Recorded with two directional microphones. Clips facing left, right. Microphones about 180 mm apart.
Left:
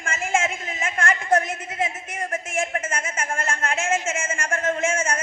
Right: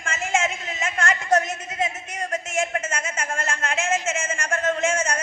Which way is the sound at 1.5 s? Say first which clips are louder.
Even; 25° left (ahead or behind).